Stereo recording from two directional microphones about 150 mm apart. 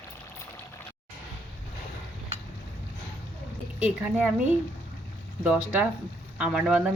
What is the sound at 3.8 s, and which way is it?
Speech, 5° right (ahead or behind).